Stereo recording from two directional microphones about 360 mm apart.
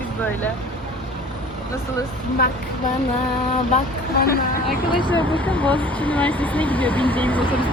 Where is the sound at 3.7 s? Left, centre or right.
Left.